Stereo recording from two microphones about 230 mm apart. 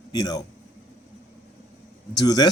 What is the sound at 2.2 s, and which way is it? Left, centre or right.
Speech, centre.